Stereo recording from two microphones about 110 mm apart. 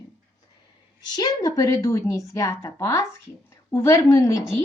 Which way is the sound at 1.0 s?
40° left (ahead or behind).